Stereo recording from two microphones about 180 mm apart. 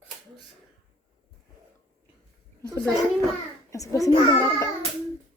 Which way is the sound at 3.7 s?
20° left (ahead or behind).